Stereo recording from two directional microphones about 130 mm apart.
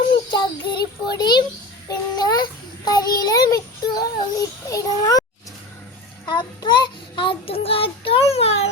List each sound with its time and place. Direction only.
0.3 s child singing: 35° left (ahead or behind)
6.2 s child singing: 35° left (ahead or behind); by 8.7 s 50° left (ahead or behind)